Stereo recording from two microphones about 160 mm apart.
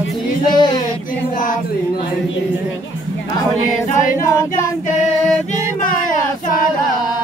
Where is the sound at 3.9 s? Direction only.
55° left (ahead or behind).